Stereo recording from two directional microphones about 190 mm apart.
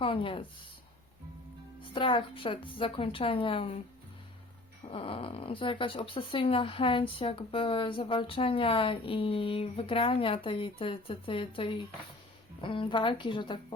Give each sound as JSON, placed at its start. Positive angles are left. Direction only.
{"t": 0.0, "sound": "speech", "side_deg": 25}
{"t": 1.9, "sound": "speech", "side_deg": 25}
{"t": 4.9, "sound": "speech", "side_deg": 30}